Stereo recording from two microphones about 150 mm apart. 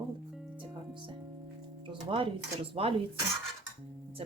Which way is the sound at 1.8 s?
35° right (ahead or behind).